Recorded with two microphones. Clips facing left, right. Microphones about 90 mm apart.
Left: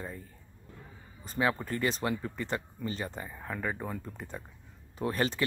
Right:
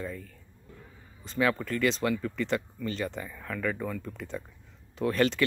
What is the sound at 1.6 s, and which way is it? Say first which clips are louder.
Speech: right 4 dB; 30° left (ahead or behind).